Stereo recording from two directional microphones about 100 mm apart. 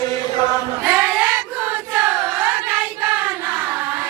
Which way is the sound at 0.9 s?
15° right (ahead or behind).